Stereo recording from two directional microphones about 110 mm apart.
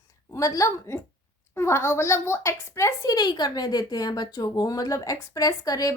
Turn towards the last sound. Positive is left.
turn(degrees=35)  # may be behind; listen again after turning